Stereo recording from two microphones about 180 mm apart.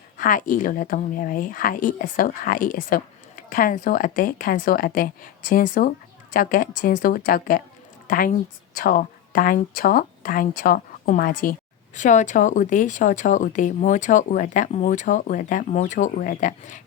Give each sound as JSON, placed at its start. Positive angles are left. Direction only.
{"t": 0.2, "sound": "a woman's voice", "side_deg": 50}